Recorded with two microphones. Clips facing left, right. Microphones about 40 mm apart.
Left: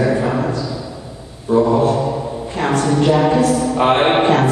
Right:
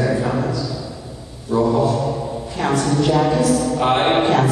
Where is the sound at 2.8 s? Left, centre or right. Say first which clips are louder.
Left 3 dB; centre.